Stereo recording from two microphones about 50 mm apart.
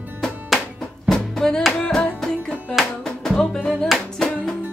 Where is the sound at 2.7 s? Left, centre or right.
Centre.